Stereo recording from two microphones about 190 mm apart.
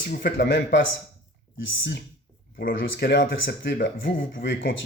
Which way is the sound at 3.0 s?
60° left (ahead or behind).